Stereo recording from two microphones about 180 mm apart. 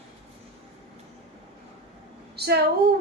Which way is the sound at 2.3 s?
60° right (ahead or behind).